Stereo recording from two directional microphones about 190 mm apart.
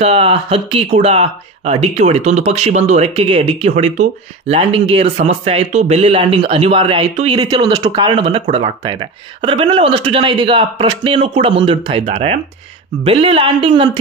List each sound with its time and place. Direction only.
0.0 s speech: 30° right (ahead or behind)